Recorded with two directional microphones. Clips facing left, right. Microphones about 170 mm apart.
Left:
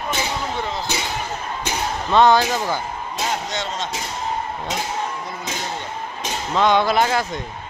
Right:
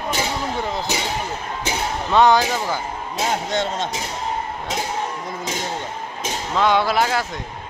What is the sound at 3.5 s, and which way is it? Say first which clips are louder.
Speech: right 4 dB; 55° right (ahead or behind).